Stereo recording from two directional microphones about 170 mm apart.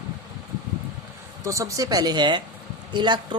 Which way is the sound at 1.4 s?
20° right (ahead or behind).